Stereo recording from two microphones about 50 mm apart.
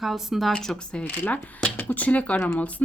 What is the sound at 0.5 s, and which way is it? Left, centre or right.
Speech, centre.